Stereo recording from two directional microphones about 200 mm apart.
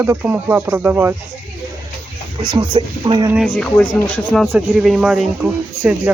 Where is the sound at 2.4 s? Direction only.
25° right (ahead or behind).